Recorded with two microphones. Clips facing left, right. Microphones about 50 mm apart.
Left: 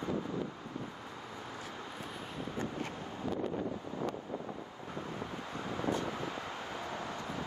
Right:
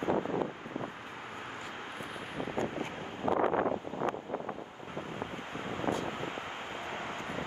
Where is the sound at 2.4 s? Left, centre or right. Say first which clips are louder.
Right 4 dB; right.